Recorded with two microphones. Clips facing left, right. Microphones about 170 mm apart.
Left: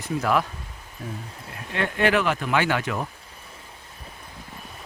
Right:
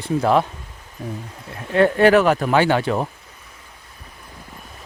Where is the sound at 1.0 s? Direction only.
15° right (ahead or behind).